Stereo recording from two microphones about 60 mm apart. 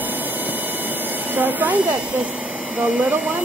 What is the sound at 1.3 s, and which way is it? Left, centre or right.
Speech, right.